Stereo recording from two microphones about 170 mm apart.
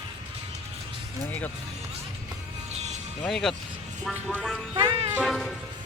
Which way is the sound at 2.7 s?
40° right (ahead or behind).